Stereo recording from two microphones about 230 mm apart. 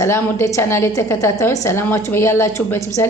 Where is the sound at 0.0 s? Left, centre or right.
Centre.